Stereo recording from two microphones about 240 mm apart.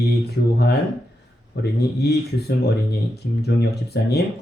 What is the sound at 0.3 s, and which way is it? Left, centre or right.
Speech, left.